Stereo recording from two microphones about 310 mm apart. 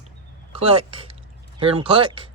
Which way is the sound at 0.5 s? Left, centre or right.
Centre.